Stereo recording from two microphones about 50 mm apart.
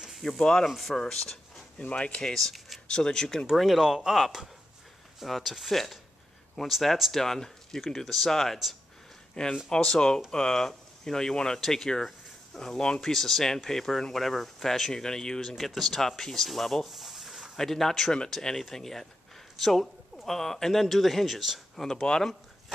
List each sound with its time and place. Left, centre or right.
0.4 s speech: centre
0.7 s speech: centre
1.8 s speech: left
2.2 s speech: centre
2.9 s speech: centre
3.5 s speech: centre
9.3 s speech: centre
21.8 s speech: centre